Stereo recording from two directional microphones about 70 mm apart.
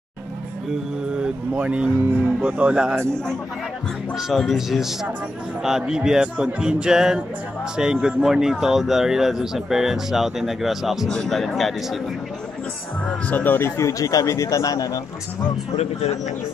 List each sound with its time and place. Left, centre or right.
1.2 s speech: centre
4.3 s speech: centre
13.3 s speech: left